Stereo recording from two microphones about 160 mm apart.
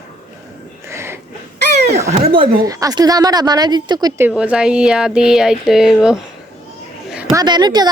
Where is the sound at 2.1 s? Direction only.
40° right (ahead or behind).